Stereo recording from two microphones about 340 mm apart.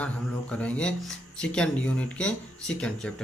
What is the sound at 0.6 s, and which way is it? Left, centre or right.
Speech, centre.